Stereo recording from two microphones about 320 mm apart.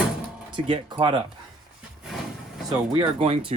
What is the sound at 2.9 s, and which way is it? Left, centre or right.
Speech, centre.